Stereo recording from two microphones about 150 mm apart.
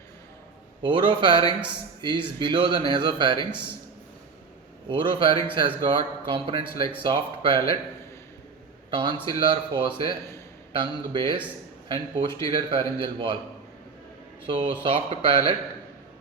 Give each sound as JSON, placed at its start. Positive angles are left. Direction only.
{"t": 0.8, "sound": "speech", "side_deg": -35}
{"t": 4.9, "sound": "speech", "side_deg": -35}
{"t": 8.9, "sound": "a man's voice", "side_deg": -35}
{"t": 14.4, "sound": "speech", "side_deg": -35}